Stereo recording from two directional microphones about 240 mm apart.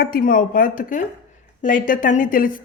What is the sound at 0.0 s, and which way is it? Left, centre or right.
A woman's voice, left.